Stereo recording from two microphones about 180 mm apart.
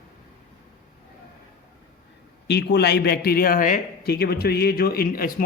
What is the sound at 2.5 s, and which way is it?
A man's voice, 65° left (ahead or behind).